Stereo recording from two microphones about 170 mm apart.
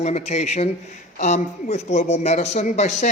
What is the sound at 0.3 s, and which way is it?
A man's voice, 40° left (ahead or behind).